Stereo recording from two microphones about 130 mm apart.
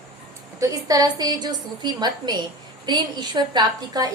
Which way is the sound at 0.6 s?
25° right (ahead or behind).